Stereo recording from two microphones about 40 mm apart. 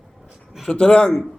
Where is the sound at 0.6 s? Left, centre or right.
Left.